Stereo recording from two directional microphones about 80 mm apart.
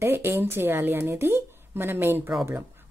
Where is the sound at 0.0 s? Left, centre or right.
Right.